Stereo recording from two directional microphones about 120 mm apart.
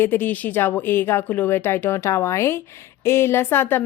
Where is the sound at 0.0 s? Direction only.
20° left (ahead or behind).